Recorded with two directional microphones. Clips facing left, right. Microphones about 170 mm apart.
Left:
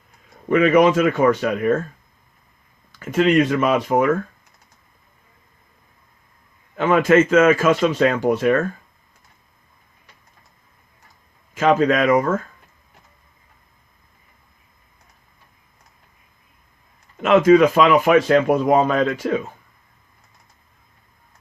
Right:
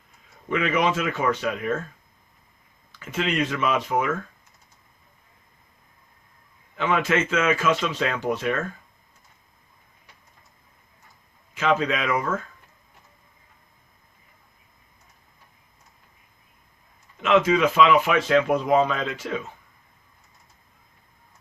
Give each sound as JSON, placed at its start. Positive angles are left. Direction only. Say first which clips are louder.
{"t": 0.4, "sound": "a man's voice", "louder": "left 9 dB", "side_deg": 50}
{"t": 3.0, "sound": "a man's voice", "louder": "left 9 dB", "side_deg": 50}
{"t": 6.7, "sound": "a man's voice", "louder": "left 8 dB", "side_deg": 50}
{"t": 11.5, "sound": "a man's voice", "louder": "left 7 dB", "side_deg": 50}
{"t": 17.2, "sound": "a man's voice", "louder": "left 7 dB", "side_deg": 45}